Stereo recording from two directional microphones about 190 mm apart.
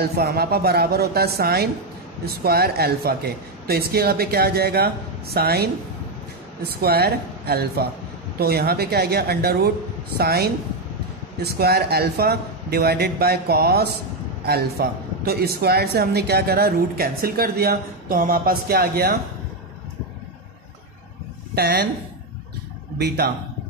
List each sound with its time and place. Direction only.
0.0 s a man's voice: 55° right (ahead or behind)
6.7 s a man's voice: 55° right (ahead or behind)
21.5 s a man's voice: 60° right (ahead or behind)
22.9 s a man's voice: 60° right (ahead or behind)